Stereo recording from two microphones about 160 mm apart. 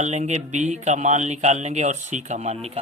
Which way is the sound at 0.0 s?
45° right (ahead or behind).